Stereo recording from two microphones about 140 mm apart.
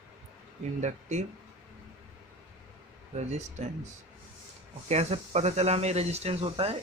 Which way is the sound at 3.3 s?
55° right (ahead or behind).